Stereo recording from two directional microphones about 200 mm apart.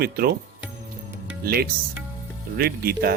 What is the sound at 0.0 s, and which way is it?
Speech, 50° right (ahead or behind).